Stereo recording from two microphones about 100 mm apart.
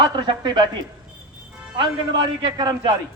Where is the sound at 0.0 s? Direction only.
45° right (ahead or behind).